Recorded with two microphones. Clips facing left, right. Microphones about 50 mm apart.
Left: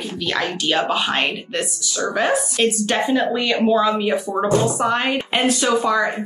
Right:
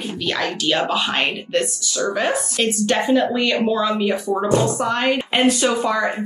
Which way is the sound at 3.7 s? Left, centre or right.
Centre.